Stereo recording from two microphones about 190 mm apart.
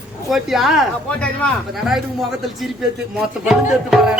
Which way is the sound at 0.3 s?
Centre (ahead or behind).